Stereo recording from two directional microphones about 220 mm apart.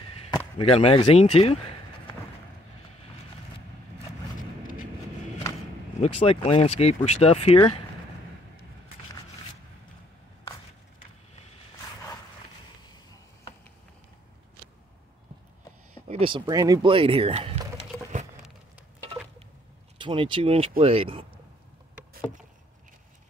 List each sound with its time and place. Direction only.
0.6 s speech: 25° left (ahead or behind)
5.9 s speech: 30° left (ahead or behind)
12.8 s a sound: 20° left (ahead or behind)
16.1 s speech: 25° right (ahead or behind)
20.0 s speech: 20° right (ahead or behind)